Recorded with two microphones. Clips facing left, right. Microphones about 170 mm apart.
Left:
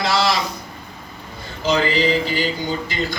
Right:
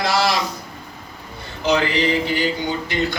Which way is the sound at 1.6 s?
65° right (ahead or behind).